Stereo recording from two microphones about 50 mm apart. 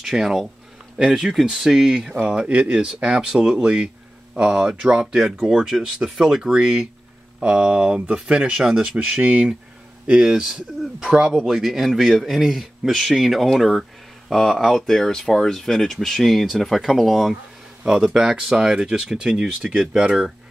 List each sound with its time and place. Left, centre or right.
0.0 s speech: centre
0.9 s speech: centre
1.3 s speech: centre
2.2 s speech: centre
5.0 s speech: centre